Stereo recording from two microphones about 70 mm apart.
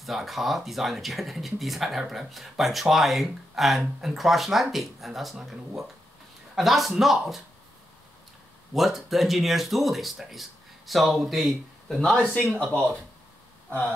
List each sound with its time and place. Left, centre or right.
0.0 s speech: centre
8.7 s speech: centre
12.5 s speech: centre